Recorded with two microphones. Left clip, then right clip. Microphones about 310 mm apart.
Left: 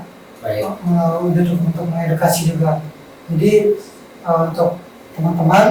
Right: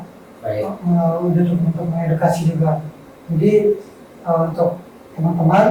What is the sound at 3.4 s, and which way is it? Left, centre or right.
Speech, right.